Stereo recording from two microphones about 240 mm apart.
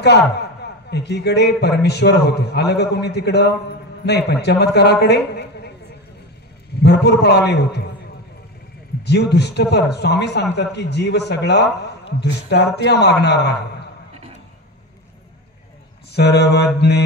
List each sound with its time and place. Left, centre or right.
0.8 s a man's voice: left
6.8 s a man's voice: left
9.0 s a man's voice: left
16.1 s a man's voice: left